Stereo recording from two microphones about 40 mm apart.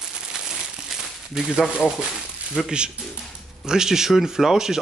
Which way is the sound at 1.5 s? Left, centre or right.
Right.